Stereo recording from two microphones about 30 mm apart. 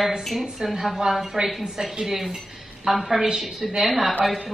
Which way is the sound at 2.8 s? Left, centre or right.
Centre.